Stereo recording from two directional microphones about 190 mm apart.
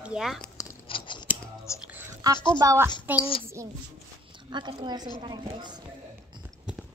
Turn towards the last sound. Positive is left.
turn(degrees=-20)  # may be behind; listen again after turning